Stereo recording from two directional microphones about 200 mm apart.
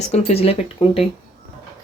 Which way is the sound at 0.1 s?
30° left (ahead or behind).